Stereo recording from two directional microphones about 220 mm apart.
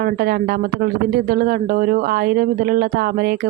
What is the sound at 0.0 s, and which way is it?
A woman's voice, 45° right (ahead or behind).